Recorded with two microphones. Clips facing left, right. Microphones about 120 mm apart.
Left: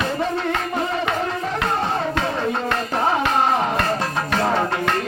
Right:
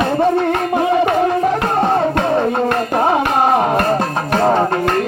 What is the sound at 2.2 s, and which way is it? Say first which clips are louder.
Music: right 7 dB; 50° right (ahead or behind).